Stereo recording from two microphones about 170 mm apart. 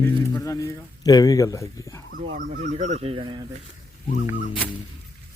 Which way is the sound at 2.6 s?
45° right (ahead or behind).